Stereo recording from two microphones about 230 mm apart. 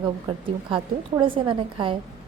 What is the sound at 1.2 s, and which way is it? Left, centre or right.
Speech, right.